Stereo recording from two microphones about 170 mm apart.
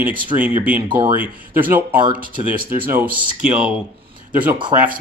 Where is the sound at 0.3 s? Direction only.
10° right (ahead or behind).